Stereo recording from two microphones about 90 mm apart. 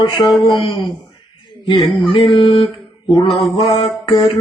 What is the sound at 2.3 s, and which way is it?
Music, 70° left (ahead or behind).